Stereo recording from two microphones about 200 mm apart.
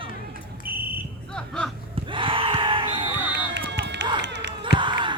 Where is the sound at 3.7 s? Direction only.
60° right (ahead or behind).